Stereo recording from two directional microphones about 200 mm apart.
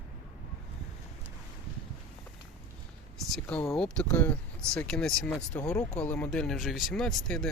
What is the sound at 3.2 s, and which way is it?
Speech, centre (ahead or behind).